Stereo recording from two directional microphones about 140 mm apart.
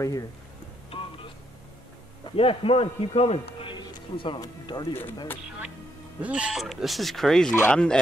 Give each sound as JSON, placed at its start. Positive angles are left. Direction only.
{"t": 0.8, "sound": "a sound", "side_deg": 40}
{"t": 2.2, "sound": "a man's voice", "side_deg": 45}
{"t": 6.2, "sound": "speech", "side_deg": -5}